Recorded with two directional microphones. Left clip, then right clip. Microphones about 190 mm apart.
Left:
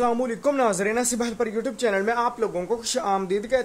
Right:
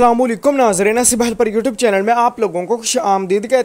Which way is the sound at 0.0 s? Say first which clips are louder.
Right 10 dB; 40° right (ahead or behind).